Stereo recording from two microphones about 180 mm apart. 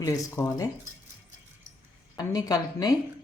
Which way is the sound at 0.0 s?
15° left (ahead or behind).